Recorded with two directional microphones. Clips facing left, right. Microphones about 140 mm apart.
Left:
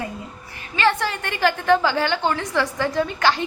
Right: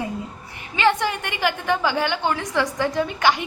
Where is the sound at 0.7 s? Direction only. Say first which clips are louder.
Right 1 dB; 15° right (ahead or behind).